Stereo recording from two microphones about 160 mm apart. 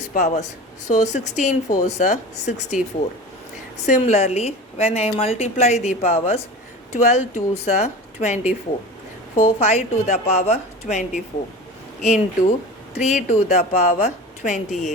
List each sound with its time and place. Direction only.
0.1 s speech: 50° left (ahead or behind)
3.8 s a woman's voice: 45° left (ahead or behind)